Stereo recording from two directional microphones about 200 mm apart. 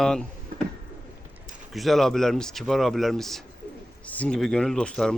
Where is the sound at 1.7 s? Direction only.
Centre (ahead or behind).